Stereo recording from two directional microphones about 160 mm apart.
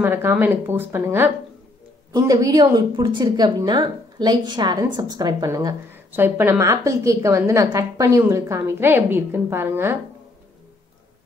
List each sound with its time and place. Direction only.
0.0 s a woman's voice: 15° right (ahead or behind)